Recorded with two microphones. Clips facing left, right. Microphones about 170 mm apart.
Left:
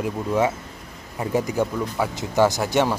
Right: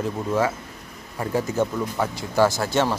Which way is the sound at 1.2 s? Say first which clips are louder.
Left 1 dB; 15° left (ahead or behind).